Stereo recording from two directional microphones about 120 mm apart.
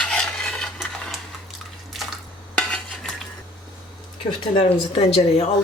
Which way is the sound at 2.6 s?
5° left (ahead or behind).